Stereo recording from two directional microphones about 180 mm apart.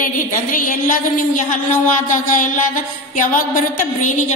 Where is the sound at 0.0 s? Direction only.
50° left (ahead or behind).